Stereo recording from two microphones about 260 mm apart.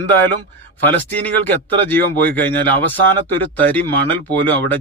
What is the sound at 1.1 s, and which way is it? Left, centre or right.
Speech, centre.